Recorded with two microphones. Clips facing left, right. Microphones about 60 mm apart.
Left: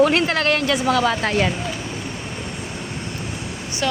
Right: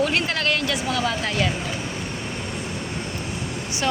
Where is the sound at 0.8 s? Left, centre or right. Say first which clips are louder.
Left 5 dB; left.